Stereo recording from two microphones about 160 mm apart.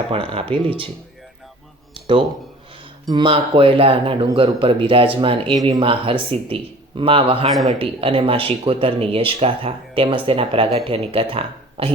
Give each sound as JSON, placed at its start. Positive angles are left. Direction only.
{"t": 0.1, "sound": "speech", "side_deg": -35}
{"t": 1.9, "sound": "a sound", "side_deg": -30}
{"t": 3.1, "sound": "speech", "side_deg": -30}